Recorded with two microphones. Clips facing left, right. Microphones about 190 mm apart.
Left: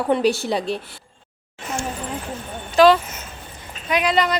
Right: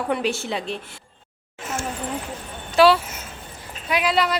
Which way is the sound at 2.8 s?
10° right (ahead or behind).